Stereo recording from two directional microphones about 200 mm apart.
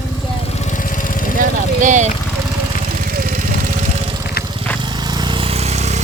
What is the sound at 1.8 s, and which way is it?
Speech, 40° right (ahead or behind).